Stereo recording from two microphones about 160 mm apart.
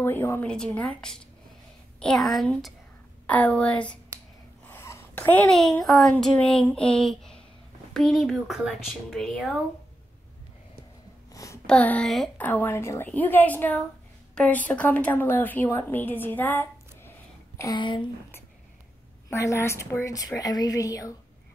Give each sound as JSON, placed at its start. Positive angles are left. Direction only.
{"t": 0.0, "sound": "a woman's voice", "side_deg": 15}
{"t": 4.6, "sound": "a sound", "side_deg": 15}
{"t": 5.5, "sound": "speech", "side_deg": 5}
{"t": 11.3, "sound": "a sound", "side_deg": 20}
{"t": 11.6, "sound": "a woman's voice", "side_deg": 5}
{"t": 17.6, "sound": "a woman's voice", "side_deg": 25}
{"t": 19.3, "sound": "a woman's voice", "side_deg": 20}